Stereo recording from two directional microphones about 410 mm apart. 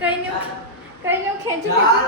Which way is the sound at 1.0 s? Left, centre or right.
Centre.